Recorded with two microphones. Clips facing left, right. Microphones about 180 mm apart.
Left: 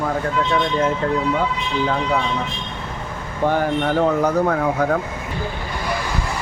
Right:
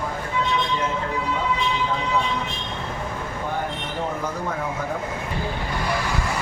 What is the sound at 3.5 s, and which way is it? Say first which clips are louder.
Speech: left 12 dB; 80° left.